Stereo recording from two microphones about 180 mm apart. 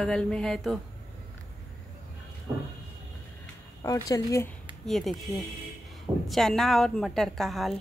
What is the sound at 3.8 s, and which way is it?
Speech, 20° left (ahead or behind).